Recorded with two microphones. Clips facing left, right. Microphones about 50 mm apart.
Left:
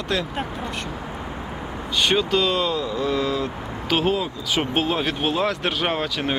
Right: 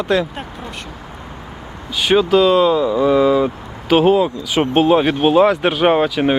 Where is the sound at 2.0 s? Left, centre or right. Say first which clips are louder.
Right 8 dB; centre.